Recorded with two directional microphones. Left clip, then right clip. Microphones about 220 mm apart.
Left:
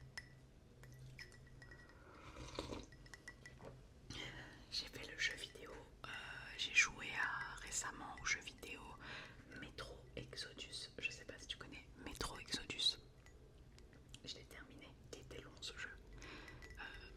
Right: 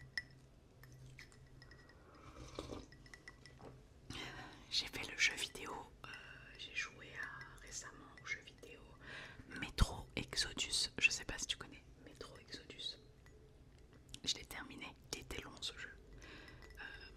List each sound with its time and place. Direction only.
2.3 s a sound: centre (ahead or behind)
4.1 s whispering: 15° right (ahead or behind); by 5.7 s 30° right (ahead or behind)
6.1 s whispering: 15° left (ahead or behind)
9.0 s whispering: centre (ahead or behind)
9.5 s whispering: 25° right (ahead or behind)
12.0 s whispering: 30° left (ahead or behind)
14.3 s whispering: 30° right (ahead or behind)
15.7 s whispering: centre (ahead or behind)